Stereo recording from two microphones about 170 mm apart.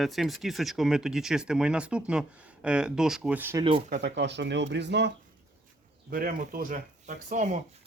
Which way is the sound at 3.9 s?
90° right.